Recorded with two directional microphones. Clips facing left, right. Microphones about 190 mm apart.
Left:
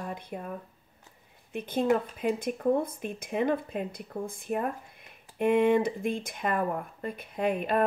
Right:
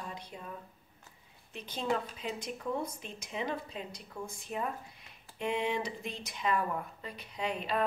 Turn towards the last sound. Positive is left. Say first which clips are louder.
# left 7 dB
turn(degrees=55)  # may be behind; listen again after turning